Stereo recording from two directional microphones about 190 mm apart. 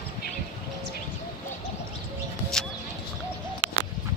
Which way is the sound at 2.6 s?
Centre (ahead or behind).